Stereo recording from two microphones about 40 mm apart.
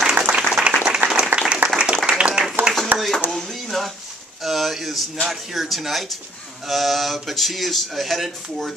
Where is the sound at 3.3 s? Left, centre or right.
Centre.